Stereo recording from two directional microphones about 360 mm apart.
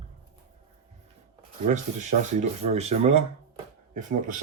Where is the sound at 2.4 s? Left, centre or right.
Centre.